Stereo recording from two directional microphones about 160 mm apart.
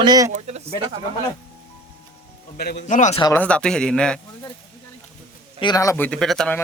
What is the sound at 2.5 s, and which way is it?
Speech, 85° left.